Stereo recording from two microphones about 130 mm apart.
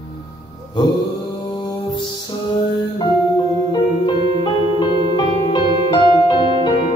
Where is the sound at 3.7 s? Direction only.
35° left (ahead or behind).